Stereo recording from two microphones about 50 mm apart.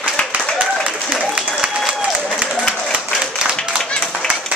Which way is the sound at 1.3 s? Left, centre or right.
Centre.